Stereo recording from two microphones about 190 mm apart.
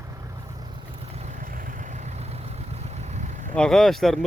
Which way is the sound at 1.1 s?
35° right (ahead or behind).